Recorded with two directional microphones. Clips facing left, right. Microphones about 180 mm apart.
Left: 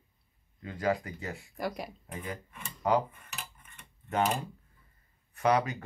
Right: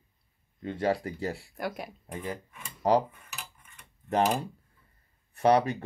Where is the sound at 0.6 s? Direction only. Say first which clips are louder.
Right 3 dB; 30° right (ahead or behind).